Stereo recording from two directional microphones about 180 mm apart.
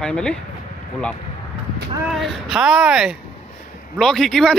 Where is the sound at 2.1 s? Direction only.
Centre (ahead or behind).